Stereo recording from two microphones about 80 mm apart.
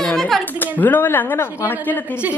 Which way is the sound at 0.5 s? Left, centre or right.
Left.